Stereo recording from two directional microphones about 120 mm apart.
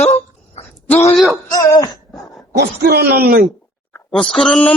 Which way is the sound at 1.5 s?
30° left (ahead or behind).